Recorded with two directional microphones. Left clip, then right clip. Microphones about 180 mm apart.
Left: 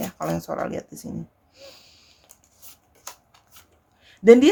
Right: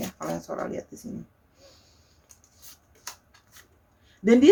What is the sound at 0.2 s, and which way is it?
Speech, 45° left (ahead or behind).